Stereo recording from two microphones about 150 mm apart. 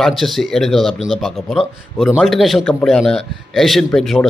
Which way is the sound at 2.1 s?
Centre (ahead or behind).